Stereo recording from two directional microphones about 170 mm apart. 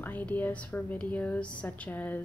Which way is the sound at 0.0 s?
10° left (ahead or behind).